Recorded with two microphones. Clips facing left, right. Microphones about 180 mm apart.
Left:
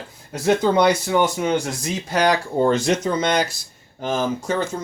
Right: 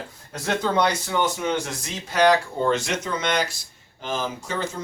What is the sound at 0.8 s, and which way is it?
Speech, 10° left (ahead or behind).